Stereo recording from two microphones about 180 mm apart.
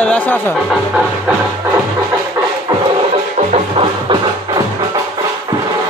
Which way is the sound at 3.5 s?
30° right (ahead or behind).